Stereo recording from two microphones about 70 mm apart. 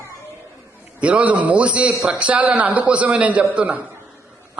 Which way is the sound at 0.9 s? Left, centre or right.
Centre.